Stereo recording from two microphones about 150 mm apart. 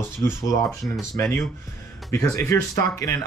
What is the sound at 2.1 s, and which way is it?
Speech, 20° left (ahead or behind).